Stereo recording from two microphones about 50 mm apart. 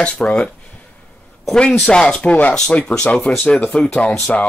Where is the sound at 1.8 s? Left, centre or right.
Centre.